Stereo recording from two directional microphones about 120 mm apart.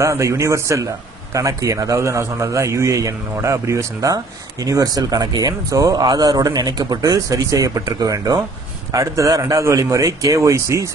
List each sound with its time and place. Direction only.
0.0 s a man's voice: 25° right (ahead or behind)